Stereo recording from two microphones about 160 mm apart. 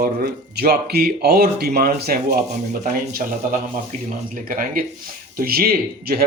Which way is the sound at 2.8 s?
55° right (ahead or behind).